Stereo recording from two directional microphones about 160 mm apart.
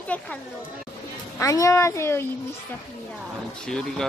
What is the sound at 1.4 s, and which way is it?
Speech, 20° left (ahead or behind).